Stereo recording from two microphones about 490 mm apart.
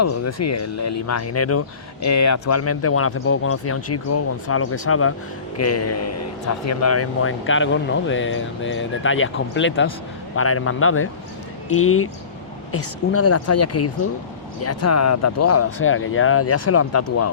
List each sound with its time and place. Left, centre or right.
0.0 s speech: left